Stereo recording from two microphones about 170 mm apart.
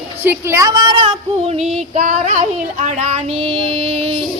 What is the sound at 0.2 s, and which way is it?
Child singing, 15° right (ahead or behind).